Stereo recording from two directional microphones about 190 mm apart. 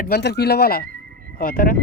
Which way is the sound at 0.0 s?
60° left (ahead or behind).